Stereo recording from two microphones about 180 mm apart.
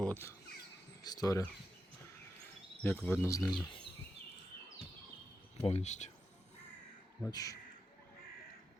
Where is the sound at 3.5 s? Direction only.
30° left (ahead or behind).